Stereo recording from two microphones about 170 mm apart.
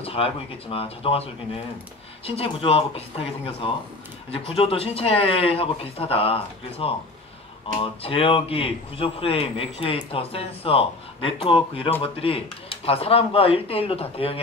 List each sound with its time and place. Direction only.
0.0 s a man's voice: 35° left (ahead or behind)
4.3 s a man's voice: 35° left (ahead or behind)